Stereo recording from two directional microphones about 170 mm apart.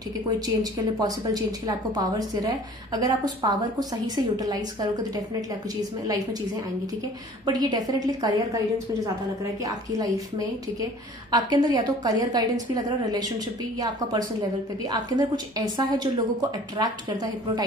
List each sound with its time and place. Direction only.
0.6 s a woman's voice: 20° right (ahead or behind)
7.4 s a woman's voice: 25° right (ahead or behind)